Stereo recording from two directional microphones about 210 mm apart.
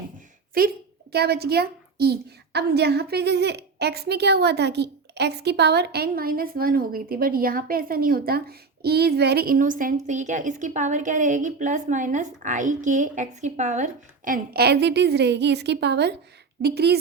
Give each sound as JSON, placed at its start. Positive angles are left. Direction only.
{"t": 0.6, "sound": "a woman's voice", "side_deg": -45}